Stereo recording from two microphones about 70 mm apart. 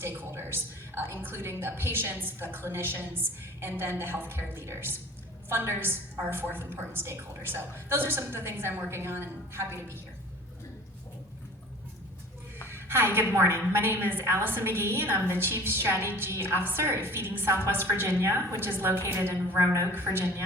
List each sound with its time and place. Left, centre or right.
0.0 s a woman's voice: right
12.6 s a woman's voice: right